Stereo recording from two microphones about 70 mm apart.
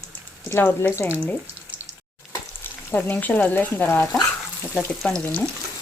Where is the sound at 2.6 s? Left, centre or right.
Left.